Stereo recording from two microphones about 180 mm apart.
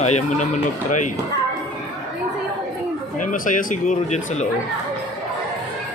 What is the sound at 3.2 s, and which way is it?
Speech, 45° left (ahead or behind).